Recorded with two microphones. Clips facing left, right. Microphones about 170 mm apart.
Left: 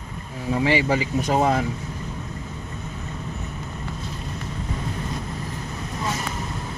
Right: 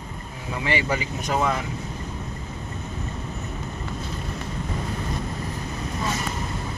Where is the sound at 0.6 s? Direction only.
30° left (ahead or behind).